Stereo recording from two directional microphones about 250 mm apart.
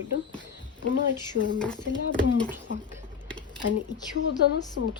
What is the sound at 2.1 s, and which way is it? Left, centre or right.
Speech, centre.